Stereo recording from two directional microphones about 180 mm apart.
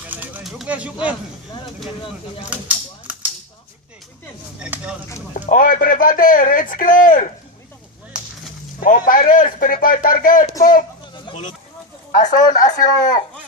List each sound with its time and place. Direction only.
0.1 s bird: 10° right (ahead or behind)
2.4 s a sound: 5° right (ahead or behind)
4.6 s speech: 5° right (ahead or behind)
5.3 s speech: 50° left (ahead or behind)
8.1 s whip: 5° right (ahead or behind)
8.8 s speech: 50° left (ahead or behind)
11.3 s speech: 35° left (ahead or behind)